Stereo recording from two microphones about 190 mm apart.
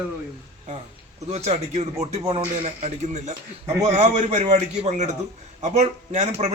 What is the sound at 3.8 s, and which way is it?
A man's voice, 35° right (ahead or behind).